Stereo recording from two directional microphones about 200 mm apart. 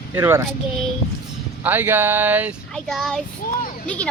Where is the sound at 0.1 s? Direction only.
15° right (ahead or behind).